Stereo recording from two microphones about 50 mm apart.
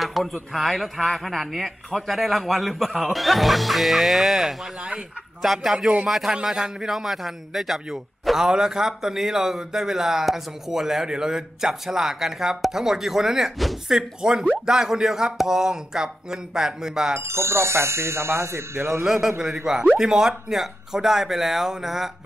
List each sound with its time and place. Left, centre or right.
0.0 s a man's voice: centre
17.2 s speech: right
19.0 s a man's voice: centre